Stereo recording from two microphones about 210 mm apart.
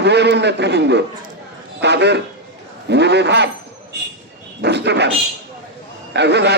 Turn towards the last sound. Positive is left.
turn(degrees=-55)  # may be behind; listen again after turning